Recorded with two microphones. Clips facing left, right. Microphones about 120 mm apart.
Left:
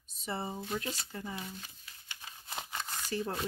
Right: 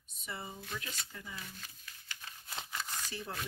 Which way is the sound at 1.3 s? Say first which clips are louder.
Left 5 dB; 25° left (ahead or behind).